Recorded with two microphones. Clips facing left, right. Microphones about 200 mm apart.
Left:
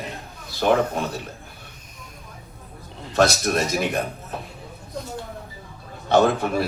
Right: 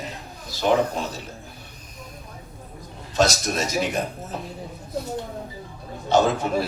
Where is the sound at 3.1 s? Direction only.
60° left (ahead or behind).